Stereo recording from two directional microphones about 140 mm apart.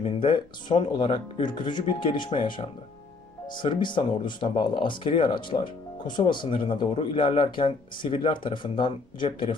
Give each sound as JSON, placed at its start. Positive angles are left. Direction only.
{"t": 0.0, "sound": "speech", "side_deg": 35}